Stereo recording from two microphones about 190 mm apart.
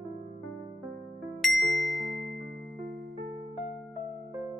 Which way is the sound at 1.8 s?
Centre (ahead or behind).